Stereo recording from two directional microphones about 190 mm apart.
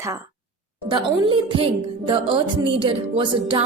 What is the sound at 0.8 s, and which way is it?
A woman's voice, 25° right (ahead or behind).